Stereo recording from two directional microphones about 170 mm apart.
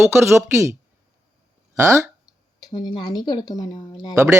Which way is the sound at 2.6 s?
20° left (ahead or behind).